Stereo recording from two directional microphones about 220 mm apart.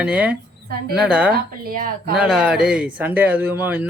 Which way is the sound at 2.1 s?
5° right (ahead or behind).